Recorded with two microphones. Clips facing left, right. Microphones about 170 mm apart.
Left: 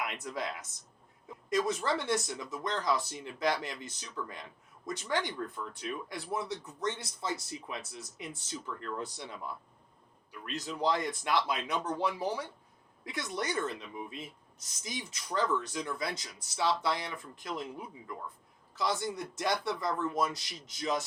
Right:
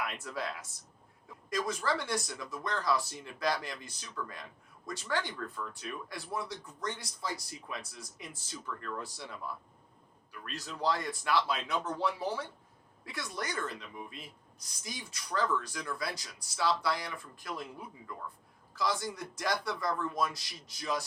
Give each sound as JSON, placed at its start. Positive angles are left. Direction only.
{"t": 0.0, "sound": "speech", "side_deg": 20}